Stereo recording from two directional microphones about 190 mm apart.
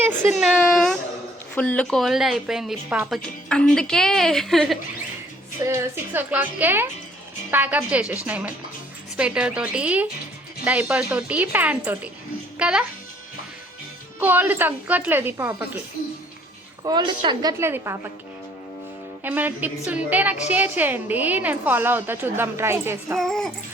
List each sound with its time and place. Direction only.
0.0 s speech: 10° right (ahead or behind)
0.4 s a woman's voice: centre (ahead or behind)
5.6 s a woman's voice: 10° right (ahead or behind)
14.2 s a woman's voice: 10° right (ahead or behind)
16.8 s a woman's voice: 25° right (ahead or behind)
17.6 s a woman's voice: 15° right (ahead or behind)
19.2 s a woman's voice: 10° right (ahead or behind)
23.1 s a woman's voice: centre (ahead or behind)